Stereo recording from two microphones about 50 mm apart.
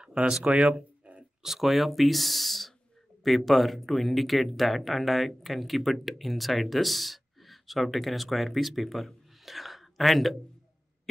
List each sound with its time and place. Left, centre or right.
0.0 s speech: right
0.7 s a sound: right
1.4 s speech: centre